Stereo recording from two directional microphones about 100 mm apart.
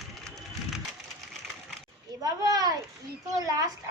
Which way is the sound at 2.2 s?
40° right (ahead or behind).